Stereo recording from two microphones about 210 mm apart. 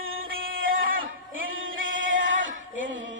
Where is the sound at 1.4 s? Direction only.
70° right (ahead or behind).